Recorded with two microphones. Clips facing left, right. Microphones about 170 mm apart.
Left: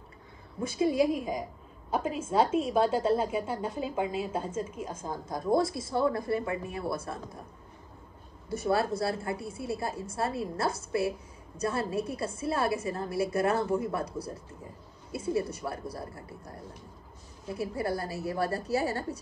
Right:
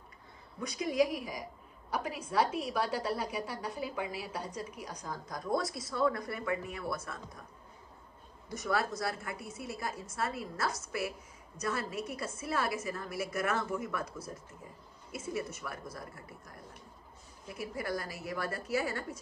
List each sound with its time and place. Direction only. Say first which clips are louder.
0.6 s a woman's voice: left 4 dB; 25° left (ahead or behind)
8.5 s a woman's voice: left 5 dB; 30° left (ahead or behind)